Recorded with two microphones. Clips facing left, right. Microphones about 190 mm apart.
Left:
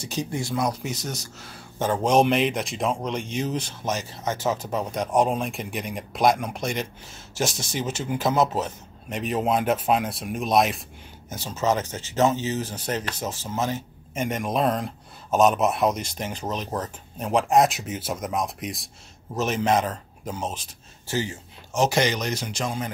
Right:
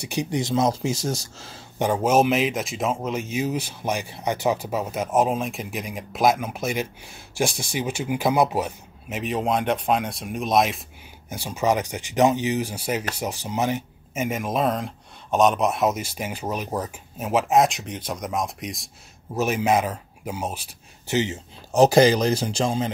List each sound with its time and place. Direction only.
0.0 s speech: 15° right (ahead or behind)
1.8 s speech: 10° right (ahead or behind)
9.2 s speech: centre (ahead or behind)
11.2 s speech: 10° right (ahead or behind)
14.1 s speech: 5° right (ahead or behind)
21.7 s speech: 35° right (ahead or behind)